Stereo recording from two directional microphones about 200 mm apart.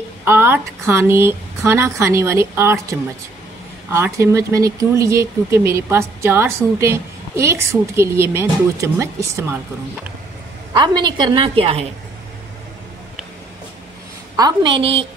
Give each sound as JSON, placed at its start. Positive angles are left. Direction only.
{"t": 0.2, "sound": "speech", "side_deg": -10}
{"t": 10.7, "sound": "a woman's voice", "side_deg": -20}
{"t": 14.3, "sound": "a woman's voice", "side_deg": -20}